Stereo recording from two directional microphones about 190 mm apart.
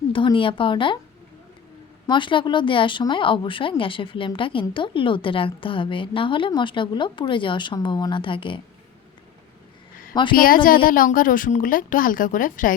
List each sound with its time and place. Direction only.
0.1 s speech: 25° left (ahead or behind)
2.0 s speech: 25° left (ahead or behind)
10.3 s a woman's voice: 50° left (ahead or behind)